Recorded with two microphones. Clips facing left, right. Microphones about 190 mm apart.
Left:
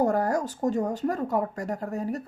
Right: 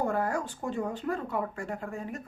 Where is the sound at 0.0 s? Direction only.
40° left (ahead or behind).